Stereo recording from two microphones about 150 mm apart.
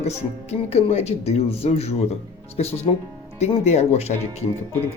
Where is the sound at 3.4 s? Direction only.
45° left (ahead or behind).